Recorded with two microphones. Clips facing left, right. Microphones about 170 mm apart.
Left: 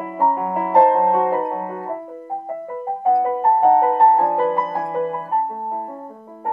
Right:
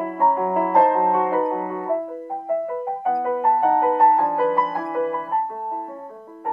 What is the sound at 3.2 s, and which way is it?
Music, 25° left (ahead or behind).